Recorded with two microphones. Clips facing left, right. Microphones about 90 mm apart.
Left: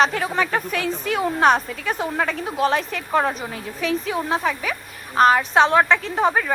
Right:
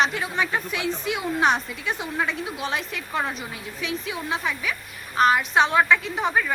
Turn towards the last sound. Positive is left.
turn(degrees=40)  # may be behind; listen again after turning